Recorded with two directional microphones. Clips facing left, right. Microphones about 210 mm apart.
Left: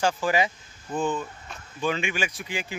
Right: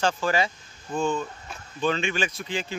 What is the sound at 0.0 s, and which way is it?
Speech, 15° left (ahead or behind).